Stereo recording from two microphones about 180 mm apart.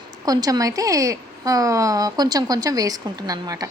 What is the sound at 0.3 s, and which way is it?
A woman's voice, 20° right (ahead or behind).